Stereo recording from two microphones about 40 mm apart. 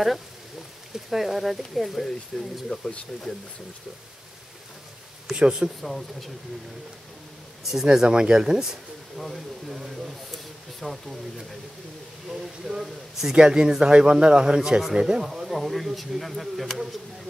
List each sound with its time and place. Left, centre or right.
0.9 s speech: centre
2.7 s speech: left
5.3 s speech: right
5.8 s speech: centre
7.7 s speech: centre
9.1 s speech: centre
12.3 s speech: centre
15.3 s speech: centre